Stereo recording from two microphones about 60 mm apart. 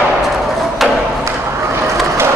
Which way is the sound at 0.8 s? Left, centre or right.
Centre.